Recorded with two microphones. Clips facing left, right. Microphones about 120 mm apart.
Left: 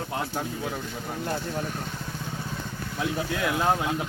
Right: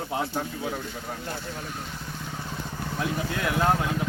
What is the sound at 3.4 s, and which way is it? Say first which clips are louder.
Speech: right 1 dB; 10° left (ahead or behind).